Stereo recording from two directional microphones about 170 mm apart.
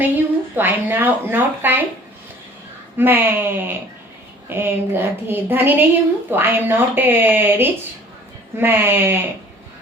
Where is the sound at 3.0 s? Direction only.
10° right (ahead or behind).